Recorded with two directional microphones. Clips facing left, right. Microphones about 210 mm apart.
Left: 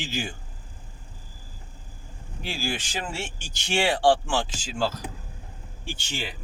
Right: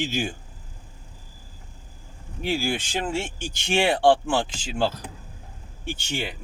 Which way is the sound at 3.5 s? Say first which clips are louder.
Right 3 dB; 55° right (ahead or behind).